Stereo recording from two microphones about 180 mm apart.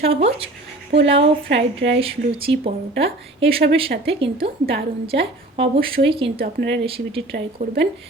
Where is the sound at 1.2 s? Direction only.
80° right.